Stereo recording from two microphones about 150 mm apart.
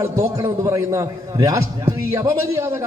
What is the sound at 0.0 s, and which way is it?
A man's voice, 20° right (ahead or behind).